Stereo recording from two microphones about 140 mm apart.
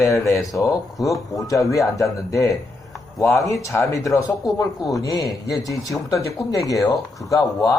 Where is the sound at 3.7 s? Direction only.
20° left (ahead or behind).